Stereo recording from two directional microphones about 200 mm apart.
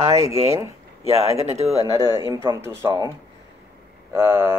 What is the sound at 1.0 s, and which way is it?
Speech, 30° right (ahead or behind).